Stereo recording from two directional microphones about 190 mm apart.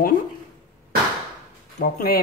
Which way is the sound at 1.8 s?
50° left (ahead or behind).